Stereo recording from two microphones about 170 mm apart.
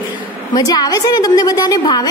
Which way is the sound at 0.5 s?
25° left (ahead or behind).